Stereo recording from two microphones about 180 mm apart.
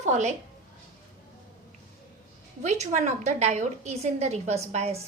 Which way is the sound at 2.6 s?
40° right (ahead or behind).